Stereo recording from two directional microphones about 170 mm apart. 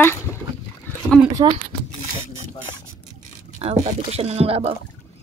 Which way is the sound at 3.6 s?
35° right (ahead or behind).